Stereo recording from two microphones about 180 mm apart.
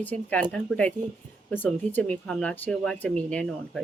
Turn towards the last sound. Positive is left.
turn(degrees=5)  # may be behind; listen again after turning